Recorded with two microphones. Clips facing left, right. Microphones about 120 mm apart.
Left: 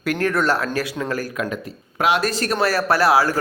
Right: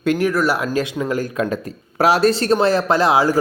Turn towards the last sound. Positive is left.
turn(degrees=-20)  # may be behind; listen again after turning